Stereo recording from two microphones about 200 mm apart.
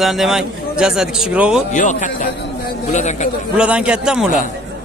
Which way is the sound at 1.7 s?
40° left (ahead or behind).